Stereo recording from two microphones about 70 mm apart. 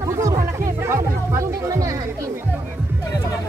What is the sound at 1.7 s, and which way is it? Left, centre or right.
Music, right.